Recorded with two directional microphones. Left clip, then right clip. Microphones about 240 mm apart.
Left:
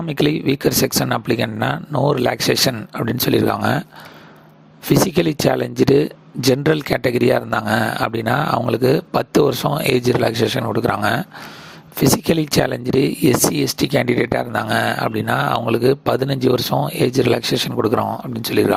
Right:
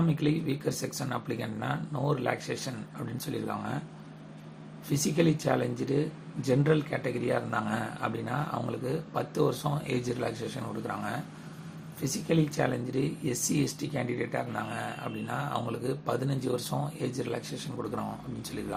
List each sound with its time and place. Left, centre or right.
0.2 s speech: left
5.1 s speech: left
12.3 s speech: left